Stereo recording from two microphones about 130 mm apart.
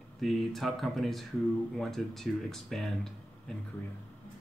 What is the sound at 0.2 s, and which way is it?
Speech, centre (ahead or behind).